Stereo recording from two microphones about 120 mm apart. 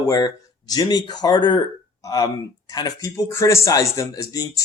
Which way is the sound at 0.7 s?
35° left (ahead or behind).